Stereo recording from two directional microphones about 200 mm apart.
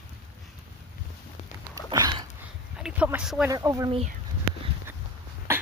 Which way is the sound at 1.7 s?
20° right (ahead or behind).